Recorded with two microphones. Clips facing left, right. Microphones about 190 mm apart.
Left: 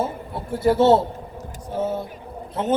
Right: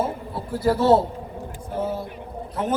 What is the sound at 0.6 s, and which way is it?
Speech, 25° left (ahead or behind).